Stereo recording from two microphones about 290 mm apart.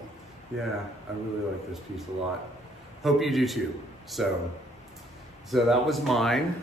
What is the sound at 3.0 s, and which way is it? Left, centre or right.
Speech, centre.